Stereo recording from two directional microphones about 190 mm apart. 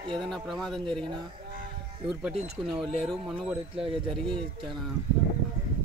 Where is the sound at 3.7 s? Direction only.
30° right (ahead or behind).